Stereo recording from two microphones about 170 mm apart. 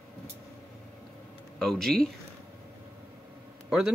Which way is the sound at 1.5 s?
Centre (ahead or behind).